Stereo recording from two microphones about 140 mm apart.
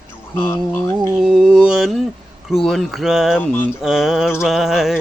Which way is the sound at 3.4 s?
15° left (ahead or behind).